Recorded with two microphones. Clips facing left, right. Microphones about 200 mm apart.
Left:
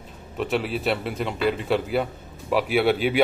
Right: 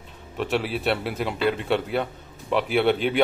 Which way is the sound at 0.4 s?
Centre (ahead or behind).